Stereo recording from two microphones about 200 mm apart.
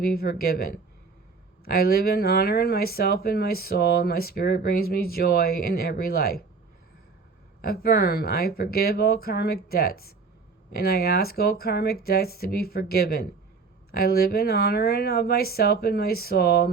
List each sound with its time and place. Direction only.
0.0 s speech: 50° left (ahead or behind)
7.6 s speech: 50° left (ahead or behind)